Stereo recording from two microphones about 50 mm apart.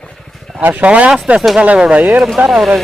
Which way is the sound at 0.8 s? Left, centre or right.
Right.